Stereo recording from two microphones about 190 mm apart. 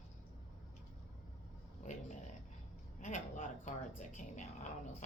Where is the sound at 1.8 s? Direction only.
40° left (ahead or behind).